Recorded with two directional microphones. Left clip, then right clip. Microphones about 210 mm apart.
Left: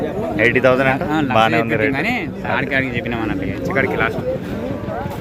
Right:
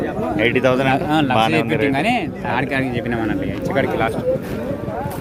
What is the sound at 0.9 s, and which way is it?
Speech, 40° right (ahead or behind).